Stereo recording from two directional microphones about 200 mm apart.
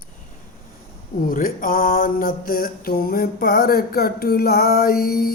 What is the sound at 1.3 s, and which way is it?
Mantra, 45° left (ahead or behind).